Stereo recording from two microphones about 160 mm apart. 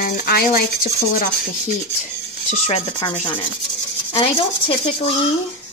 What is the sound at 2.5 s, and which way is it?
Speech, 40° left (ahead or behind).